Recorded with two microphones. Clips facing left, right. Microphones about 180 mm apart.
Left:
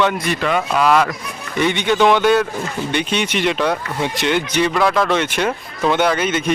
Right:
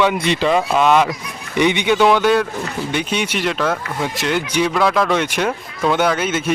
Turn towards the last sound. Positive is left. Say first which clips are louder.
# left 1 dB
turn(degrees=-5)  # may be behind; listen again after turning